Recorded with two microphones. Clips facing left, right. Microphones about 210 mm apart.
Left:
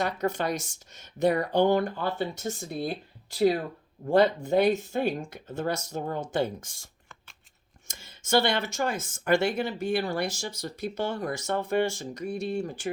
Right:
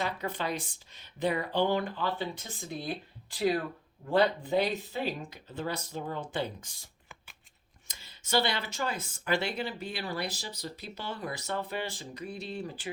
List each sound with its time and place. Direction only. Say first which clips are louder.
0.0 s speech: left 6 dB; 45° left (ahead or behind)
7.9 s speech: left 6 dB; 45° left (ahead or behind)